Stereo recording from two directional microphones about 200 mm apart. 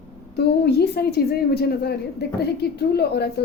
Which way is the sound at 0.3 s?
55° left (ahead or behind).